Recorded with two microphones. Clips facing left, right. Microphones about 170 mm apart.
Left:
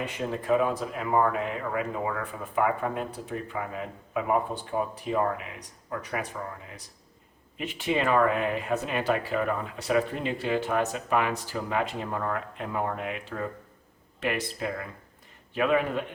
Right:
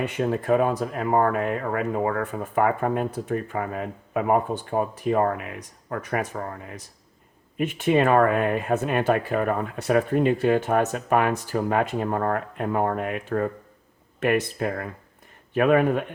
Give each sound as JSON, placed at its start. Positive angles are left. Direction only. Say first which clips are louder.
{"t": 0.0, "sound": "speech", "louder": "right 6 dB", "side_deg": -55}